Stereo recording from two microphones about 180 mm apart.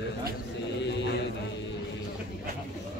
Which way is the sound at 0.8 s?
75° left (ahead or behind).